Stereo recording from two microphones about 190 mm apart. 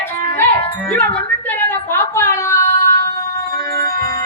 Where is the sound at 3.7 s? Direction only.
55° right (ahead or behind).